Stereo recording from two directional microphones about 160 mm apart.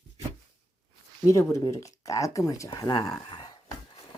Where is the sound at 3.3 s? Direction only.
25° left (ahead or behind).